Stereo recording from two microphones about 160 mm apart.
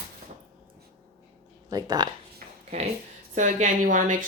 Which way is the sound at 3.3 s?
50° right (ahead or behind).